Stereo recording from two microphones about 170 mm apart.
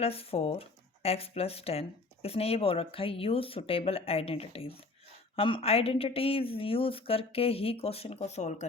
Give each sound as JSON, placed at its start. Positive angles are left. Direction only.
{"t": 0.0, "sound": "speech", "side_deg": 35}